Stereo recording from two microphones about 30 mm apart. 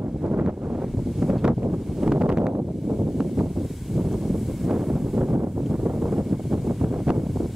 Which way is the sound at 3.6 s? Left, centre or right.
Centre.